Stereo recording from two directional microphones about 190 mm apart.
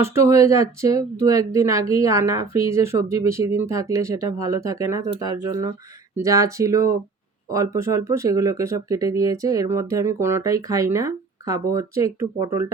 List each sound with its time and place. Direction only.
0.0 s speech: 15° right (ahead or behind)